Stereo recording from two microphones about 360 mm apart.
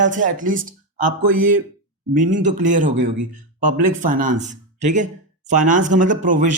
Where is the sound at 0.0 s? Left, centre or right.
Right.